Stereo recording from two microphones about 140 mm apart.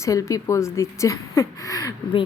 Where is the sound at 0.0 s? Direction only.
25° left (ahead or behind).